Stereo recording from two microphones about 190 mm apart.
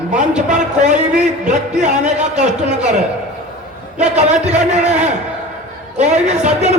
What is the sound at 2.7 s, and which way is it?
Speech, 40° right (ahead or behind).